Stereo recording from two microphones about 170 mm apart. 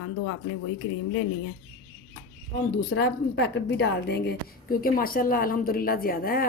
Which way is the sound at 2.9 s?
85° left.